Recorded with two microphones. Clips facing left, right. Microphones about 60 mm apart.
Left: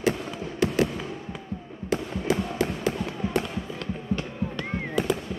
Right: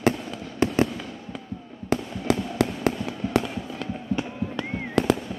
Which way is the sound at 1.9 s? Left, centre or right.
Right.